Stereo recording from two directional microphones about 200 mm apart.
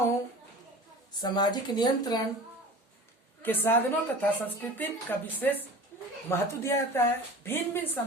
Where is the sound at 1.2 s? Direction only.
20° left (ahead or behind).